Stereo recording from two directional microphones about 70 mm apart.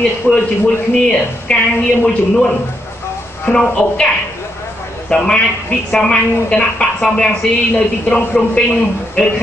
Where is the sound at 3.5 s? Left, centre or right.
Centre.